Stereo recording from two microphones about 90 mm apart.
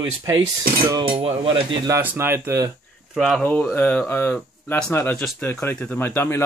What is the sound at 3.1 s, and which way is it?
Speech, 5° left (ahead or behind).